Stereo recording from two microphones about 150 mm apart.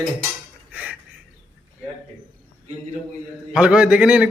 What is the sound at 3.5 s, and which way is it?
Speech, 5° right (ahead or behind).